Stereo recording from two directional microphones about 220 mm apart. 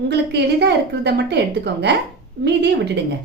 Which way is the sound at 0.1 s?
50° right (ahead or behind).